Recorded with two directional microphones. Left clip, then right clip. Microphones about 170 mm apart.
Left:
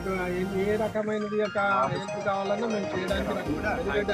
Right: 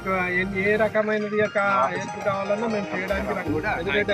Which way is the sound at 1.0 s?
10° left (ahead or behind).